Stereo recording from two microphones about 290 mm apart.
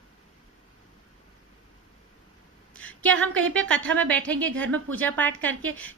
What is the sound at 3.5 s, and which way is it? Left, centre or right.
A woman's voice, centre.